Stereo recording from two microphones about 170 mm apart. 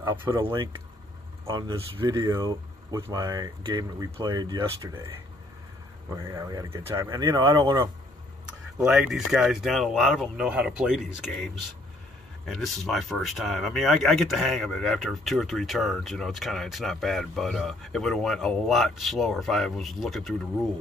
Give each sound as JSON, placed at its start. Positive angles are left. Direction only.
{"t": 0.0, "sound": "speech", "side_deg": -15}
{"t": 0.4, "sound": "speech", "side_deg": -25}
{"t": 6.1, "sound": "speech", "side_deg": -20}
{"t": 8.7, "sound": "speech", "side_deg": -5}
{"t": 12.4, "sound": "speech", "side_deg": 0}